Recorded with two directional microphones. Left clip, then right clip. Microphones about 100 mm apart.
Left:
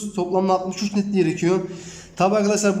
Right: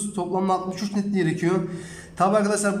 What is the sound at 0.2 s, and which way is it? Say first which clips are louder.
A man's voice: left 4 dB; 10° left (ahead or behind).